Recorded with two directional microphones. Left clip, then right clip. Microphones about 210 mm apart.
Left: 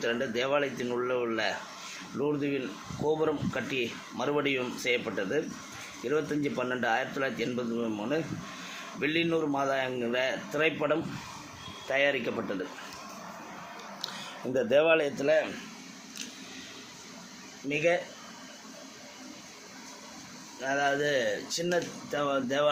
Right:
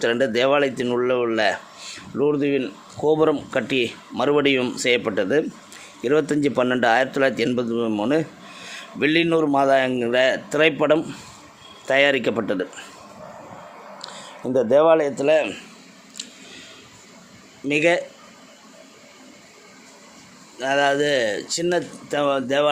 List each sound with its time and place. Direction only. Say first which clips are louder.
0.0 s speech: right 11 dB; 50° right (ahead or behind)
14.7 s speech: right 8 dB; 25° right (ahead or behind)
17.7 s speech: right 8 dB; 55° right (ahead or behind)
20.6 s speech: right 9 dB; 50° right (ahead or behind)